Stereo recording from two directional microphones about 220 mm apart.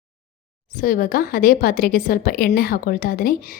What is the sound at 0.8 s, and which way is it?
A woman's voice, 40° left (ahead or behind).